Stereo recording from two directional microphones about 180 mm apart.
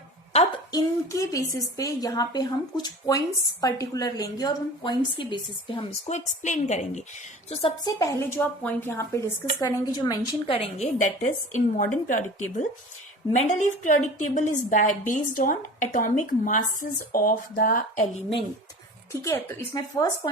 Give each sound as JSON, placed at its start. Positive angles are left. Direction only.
{"t": 0.3, "sound": "a woman's voice", "side_deg": 25}
{"t": 6.1, "sound": "a woman's voice", "side_deg": 40}
{"t": 7.9, "sound": "a woman's voice", "side_deg": 15}
{"t": 10.5, "sound": "a woman's voice", "side_deg": 35}
{"t": 19.1, "sound": "a woman's voice", "side_deg": 15}